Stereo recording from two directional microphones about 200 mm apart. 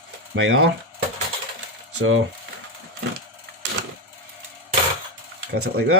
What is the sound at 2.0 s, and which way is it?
Speech, 90° right.